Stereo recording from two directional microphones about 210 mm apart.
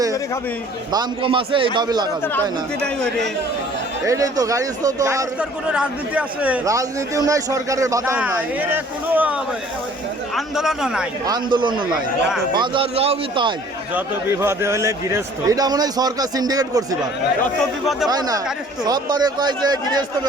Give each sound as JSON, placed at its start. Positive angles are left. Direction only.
{"t": 0.9, "sound": "a man's voice", "side_deg": -25}
{"t": 2.8, "sound": "a man's voice", "side_deg": 5}
{"t": 4.0, "sound": "a man's voice", "side_deg": -15}
{"t": 11.3, "sound": "a man's voice", "side_deg": -20}
{"t": 13.9, "sound": "a man's voice", "side_deg": -10}
{"t": 17.6, "sound": "a man's voice", "side_deg": 0}
{"t": 18.1, "sound": "a man's voice", "side_deg": -15}